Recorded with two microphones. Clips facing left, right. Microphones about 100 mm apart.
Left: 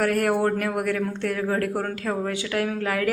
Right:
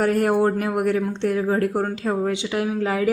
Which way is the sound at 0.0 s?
25° right (ahead or behind).